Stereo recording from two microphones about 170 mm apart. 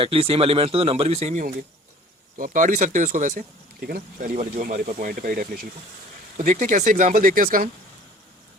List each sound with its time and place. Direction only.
0.0 s speech: 35° right (ahead or behind); by 7.7 s 50° right (ahead or behind)